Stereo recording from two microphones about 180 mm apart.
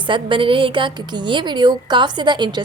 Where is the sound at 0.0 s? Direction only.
25° right (ahead or behind).